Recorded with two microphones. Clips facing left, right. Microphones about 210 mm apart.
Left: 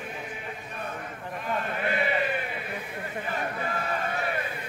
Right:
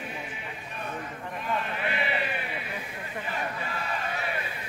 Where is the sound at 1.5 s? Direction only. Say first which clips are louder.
Left 4 dB; 45° left (ahead or behind).